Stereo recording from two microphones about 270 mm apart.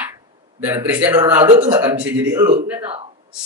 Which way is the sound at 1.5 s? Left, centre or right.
Centre.